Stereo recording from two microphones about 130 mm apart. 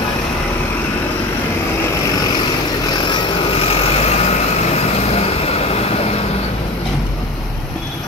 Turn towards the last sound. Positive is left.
turn(degrees=50)  # may be behind; listen again after turning